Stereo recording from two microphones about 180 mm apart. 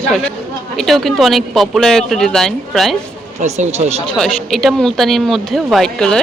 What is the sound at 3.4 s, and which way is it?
Speech, 40° right (ahead or behind).